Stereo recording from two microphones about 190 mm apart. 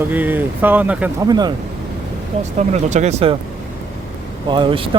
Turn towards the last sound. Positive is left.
turn(degrees=-25)  # may be behind; listen again after turning